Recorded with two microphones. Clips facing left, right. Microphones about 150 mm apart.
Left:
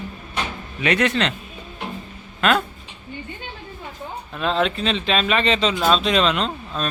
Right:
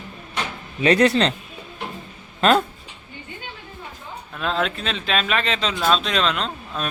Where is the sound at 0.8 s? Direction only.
35° right (ahead or behind).